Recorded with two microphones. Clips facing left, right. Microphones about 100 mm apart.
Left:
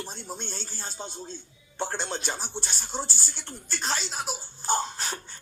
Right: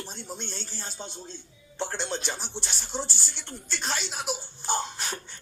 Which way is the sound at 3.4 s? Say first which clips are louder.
Even; 5° left (ahead or behind).